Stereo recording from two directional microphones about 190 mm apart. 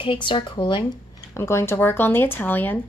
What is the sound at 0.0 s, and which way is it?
Speech, 25° left (ahead or behind).